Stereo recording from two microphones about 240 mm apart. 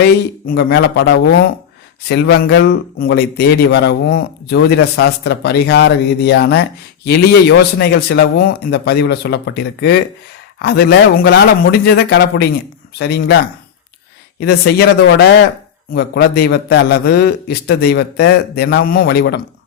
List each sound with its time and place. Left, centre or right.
0.4 s a man's voice: left
10.6 s a man's voice: left